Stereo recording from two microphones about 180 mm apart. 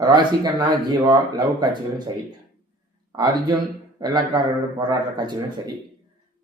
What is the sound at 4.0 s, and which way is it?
Speech, 25° right (ahead or behind).